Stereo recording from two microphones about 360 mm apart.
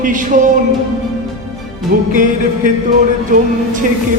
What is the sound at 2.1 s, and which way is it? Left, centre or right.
Music, right.